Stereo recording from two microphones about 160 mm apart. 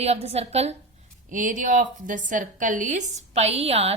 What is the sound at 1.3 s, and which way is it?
A woman's voice, 55° right (ahead or behind).